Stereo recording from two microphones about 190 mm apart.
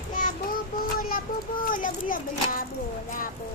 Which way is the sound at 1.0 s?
50° left (ahead or behind).